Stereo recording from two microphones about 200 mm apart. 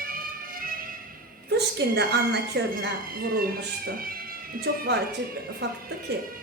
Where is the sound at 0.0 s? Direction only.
45° right (ahead or behind).